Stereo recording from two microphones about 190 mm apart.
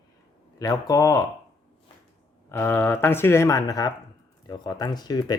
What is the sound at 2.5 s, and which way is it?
Speech, 10° left (ahead or behind).